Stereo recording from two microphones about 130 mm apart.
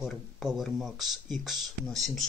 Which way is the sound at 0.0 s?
5° right (ahead or behind).